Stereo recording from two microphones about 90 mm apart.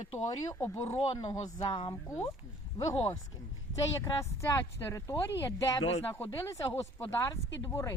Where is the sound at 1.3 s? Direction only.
45° left (ahead or behind).